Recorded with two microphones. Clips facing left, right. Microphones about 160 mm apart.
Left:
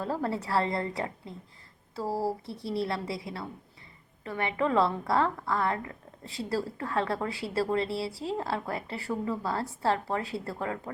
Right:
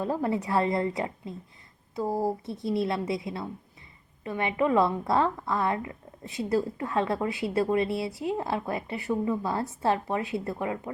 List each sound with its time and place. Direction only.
0.0 s a woman's voice: 20° right (ahead or behind)